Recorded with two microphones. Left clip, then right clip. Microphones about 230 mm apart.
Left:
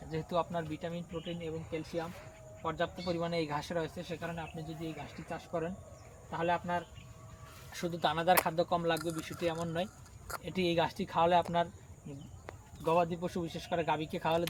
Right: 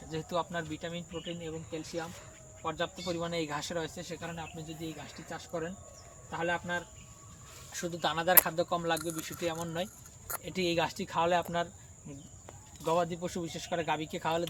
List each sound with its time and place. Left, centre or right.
0.1 s speech: centre
12.8 s speech: centre